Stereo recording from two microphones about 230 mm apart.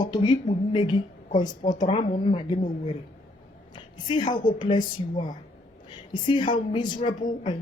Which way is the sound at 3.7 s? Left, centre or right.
Centre.